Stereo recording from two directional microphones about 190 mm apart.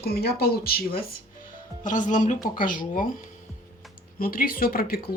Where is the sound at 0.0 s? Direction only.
55° left (ahead or behind).